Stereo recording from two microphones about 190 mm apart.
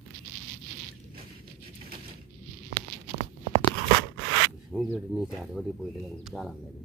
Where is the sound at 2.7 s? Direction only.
45° right (ahead or behind).